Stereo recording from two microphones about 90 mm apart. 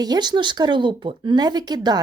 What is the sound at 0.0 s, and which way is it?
Speech, 50° right (ahead or behind).